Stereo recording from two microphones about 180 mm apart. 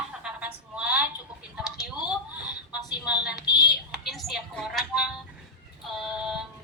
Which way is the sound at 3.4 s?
20° left (ahead or behind).